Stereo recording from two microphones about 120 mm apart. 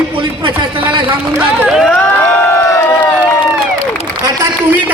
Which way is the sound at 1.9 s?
15° left (ahead or behind).